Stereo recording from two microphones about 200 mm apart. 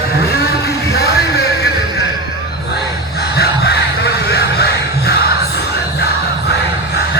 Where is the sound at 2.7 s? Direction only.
55° left (ahead or behind).